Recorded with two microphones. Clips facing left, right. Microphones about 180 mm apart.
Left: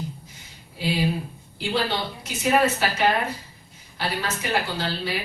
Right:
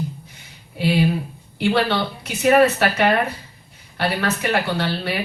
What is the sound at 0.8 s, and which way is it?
A woman's voice, 65° right (ahead or behind).